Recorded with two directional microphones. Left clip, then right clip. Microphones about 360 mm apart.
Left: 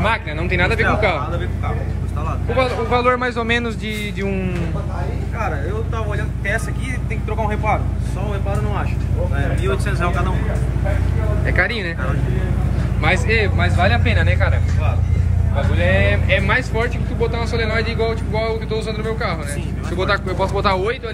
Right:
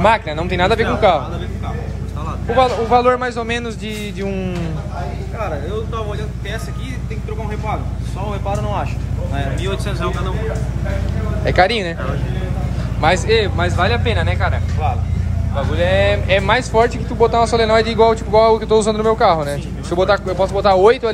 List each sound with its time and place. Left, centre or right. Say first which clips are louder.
0.0 s speech: right 6 dB; centre
2.5 s a man's voice: right 5 dB; centre
7.4 s a man's voice: left 4 dB; centre
9.8 s speech: left 1 dB; centre
11.4 s speech: right 6 dB; centre
13.0 s speech: right 4 dB; centre
15.8 s speech: right 4 dB; centre